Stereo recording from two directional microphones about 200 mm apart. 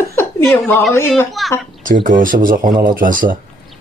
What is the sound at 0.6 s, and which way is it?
Speech, centre (ahead or behind).